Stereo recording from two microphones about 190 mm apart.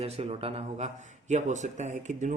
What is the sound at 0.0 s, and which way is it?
Speech, 30° right (ahead or behind).